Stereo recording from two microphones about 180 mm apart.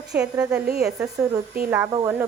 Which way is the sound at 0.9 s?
20° right (ahead or behind).